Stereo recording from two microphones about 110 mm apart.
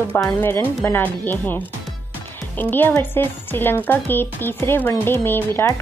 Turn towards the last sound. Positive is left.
turn(degrees=20)  # may be behind; listen again after turning